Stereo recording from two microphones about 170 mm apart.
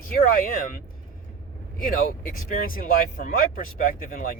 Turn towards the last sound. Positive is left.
turn(degrees=55)  # may be behind; listen again after turning